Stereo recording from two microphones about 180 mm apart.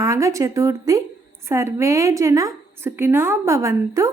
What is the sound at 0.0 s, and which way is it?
A woman's voice, 15° right (ahead or behind).